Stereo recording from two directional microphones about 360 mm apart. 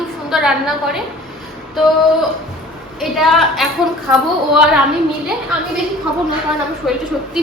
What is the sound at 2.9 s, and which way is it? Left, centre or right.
Speech, centre.